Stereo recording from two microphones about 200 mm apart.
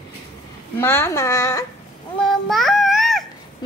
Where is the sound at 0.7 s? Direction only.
10° left (ahead or behind).